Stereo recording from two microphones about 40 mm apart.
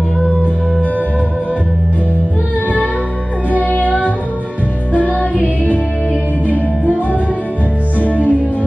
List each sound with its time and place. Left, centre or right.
3.5 s music: left
4.9 s music: right
8.0 s music: left